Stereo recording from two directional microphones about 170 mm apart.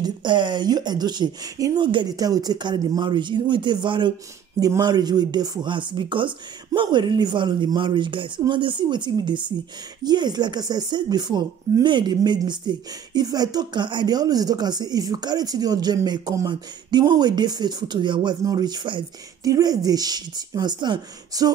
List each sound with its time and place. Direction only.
0.0 s speech: 25° right (ahead or behind)